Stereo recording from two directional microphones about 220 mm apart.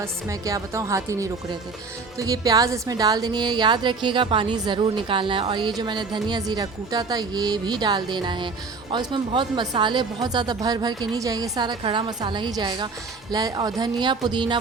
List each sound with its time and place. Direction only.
0.0 s a woman's voice: 15° right (ahead or behind)